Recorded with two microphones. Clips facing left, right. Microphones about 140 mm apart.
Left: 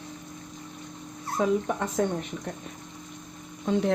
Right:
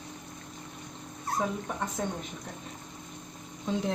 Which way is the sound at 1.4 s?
85° left.